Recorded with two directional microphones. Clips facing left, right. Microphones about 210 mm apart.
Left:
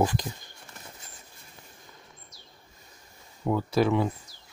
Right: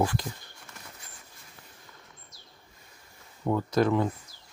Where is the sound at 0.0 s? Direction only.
15° left (ahead or behind).